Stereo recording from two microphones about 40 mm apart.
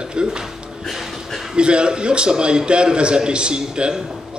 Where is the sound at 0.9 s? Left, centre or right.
Centre.